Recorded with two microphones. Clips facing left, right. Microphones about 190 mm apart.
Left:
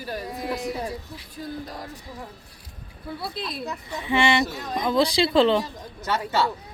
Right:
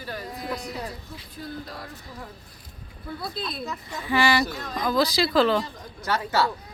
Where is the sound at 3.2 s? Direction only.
5° left (ahead or behind); by 5.6 s 25° left (ahead or behind).